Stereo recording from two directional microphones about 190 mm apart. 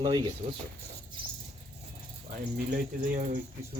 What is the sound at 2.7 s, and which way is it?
Speech, 45° right (ahead or behind).